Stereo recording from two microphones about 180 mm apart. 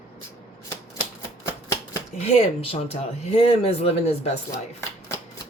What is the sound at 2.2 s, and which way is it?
Speech, 35° left (ahead or behind).